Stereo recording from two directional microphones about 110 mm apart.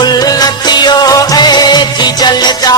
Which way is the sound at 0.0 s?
35° left (ahead or behind).